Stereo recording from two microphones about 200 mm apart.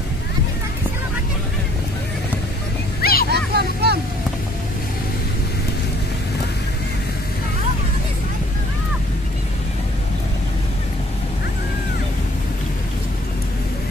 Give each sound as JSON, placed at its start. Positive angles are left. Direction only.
{"t": 3.0, "sound": "vehicle", "side_deg": 50}
{"t": 3.3, "sound": "vehicle", "side_deg": -55}